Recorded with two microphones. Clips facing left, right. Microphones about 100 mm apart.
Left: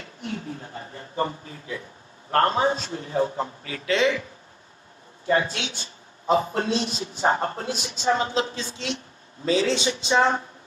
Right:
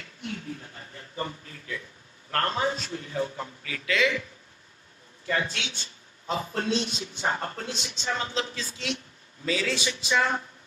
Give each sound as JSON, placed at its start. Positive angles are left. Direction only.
{"t": 0.0, "sound": "a sound", "side_deg": 35}
{"t": 2.3, "sound": "a man's voice", "side_deg": 35}
{"t": 5.2, "sound": "a man's voice", "side_deg": 30}
{"t": 8.3, "sound": "speech", "side_deg": 25}